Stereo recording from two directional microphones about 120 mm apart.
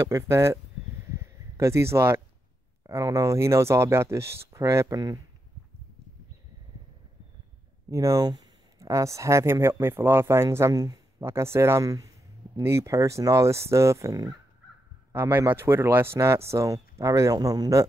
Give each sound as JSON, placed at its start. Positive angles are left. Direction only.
{"t": 0.0, "sound": "speech", "side_deg": -25}
{"t": 1.1, "sound": "a sound", "side_deg": -25}
{"t": 2.9, "sound": "speech", "side_deg": -25}
{"t": 7.9, "sound": "speech", "side_deg": -25}